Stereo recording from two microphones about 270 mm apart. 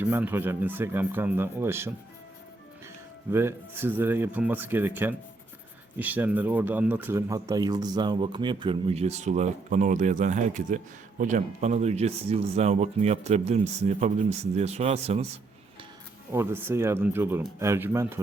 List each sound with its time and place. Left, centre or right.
0.0 s speech: centre
3.3 s speech: centre
16.3 s speech: centre